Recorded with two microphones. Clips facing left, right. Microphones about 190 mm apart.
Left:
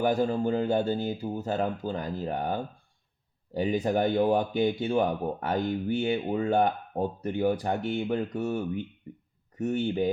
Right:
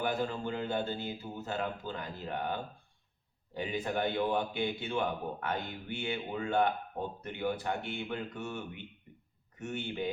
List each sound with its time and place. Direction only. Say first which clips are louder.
0.0 s speech: left 8 dB; 40° left (ahead or behind)